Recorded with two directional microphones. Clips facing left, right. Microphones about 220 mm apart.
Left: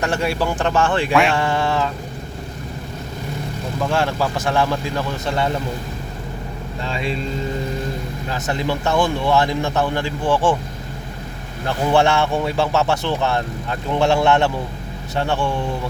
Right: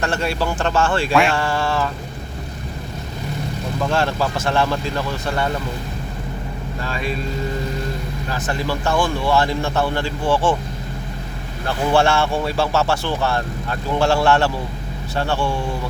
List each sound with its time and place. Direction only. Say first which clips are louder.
0.0 s speech: left 1 dB; 15° left (ahead or behind)
1.1 s a sound: even; centre (ahead or behind)
1.4 s speech: left 1 dB; 20° left (ahead or behind)
3.8 s speech: even; 15° left (ahead or behind)
6.8 s speech: left 1 dB; 25° left (ahead or behind)
8.3 s speech: left 1 dB; 20° left (ahead or behind)
11.6 s speech: left 1 dB; 15° left (ahead or behind)